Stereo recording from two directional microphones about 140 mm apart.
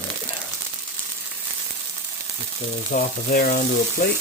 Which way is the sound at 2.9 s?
80° left.